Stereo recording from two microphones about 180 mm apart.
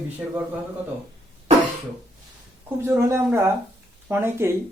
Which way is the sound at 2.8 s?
15° right (ahead or behind).